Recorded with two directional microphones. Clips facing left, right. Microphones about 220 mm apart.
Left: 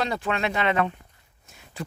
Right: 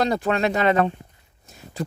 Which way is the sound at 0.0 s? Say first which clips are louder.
Right 5 dB; 40° right (ahead or behind).